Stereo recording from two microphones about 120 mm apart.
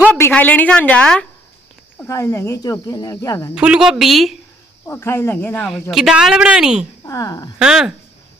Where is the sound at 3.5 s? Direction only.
10° right (ahead or behind).